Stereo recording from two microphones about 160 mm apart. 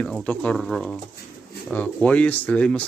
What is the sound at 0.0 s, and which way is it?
A man's voice, 5° left (ahead or behind).